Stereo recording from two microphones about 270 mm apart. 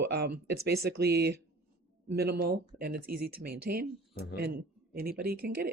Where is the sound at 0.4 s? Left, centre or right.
Right.